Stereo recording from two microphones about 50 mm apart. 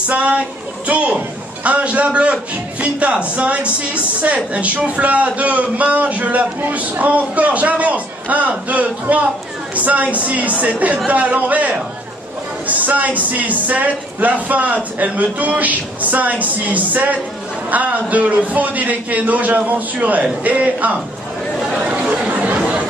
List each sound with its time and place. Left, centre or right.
0.1 s a man's voice: right
22.0 s chatter: right